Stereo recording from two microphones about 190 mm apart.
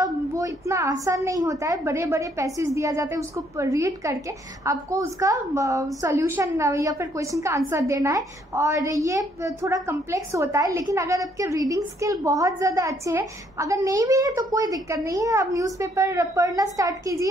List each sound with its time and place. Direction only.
0.0 s a child's voice: 15° right (ahead or behind)